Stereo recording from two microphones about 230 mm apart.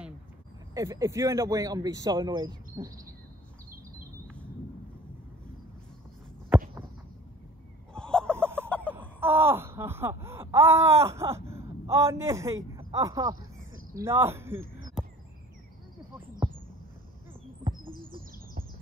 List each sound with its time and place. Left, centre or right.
0.7 s speech: centre
7.9 s fowl: centre
8.3 s fowl: centre
8.6 s chicken: centre
9.2 s wail: centre
12.7 s speech: centre